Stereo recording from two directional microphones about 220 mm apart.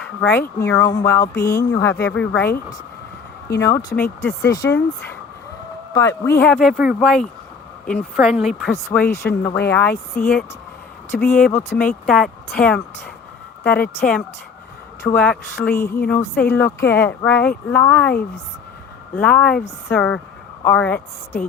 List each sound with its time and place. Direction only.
0.2 s a woman's voice: 10° left (ahead or behind)
15.0 s a woman's voice: 5° left (ahead or behind)